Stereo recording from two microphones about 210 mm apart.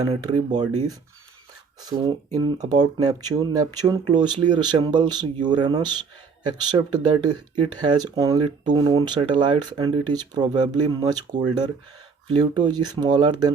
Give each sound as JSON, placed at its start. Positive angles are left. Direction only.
{"t": 0.1, "sound": "speech", "side_deg": -20}
{"t": 1.8, "sound": "speech", "side_deg": -20}